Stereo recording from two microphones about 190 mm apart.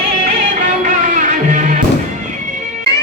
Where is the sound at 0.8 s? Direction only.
40° right (ahead or behind).